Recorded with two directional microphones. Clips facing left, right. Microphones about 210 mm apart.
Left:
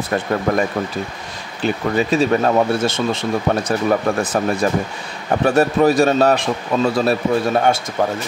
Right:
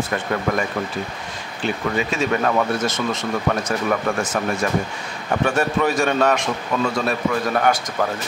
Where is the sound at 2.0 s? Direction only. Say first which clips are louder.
Left 6 dB; 35° left (ahead or behind).